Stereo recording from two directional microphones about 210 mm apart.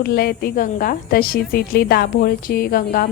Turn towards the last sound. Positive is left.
turn(degrees=45)  # may be behind; listen again after turning